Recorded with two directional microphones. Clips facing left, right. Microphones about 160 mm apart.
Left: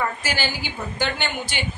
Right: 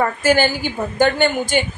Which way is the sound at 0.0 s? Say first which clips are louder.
Right 10 dB; 50° right (ahead or behind).